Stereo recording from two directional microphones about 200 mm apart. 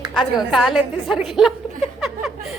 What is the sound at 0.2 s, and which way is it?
Speech, centre (ahead or behind).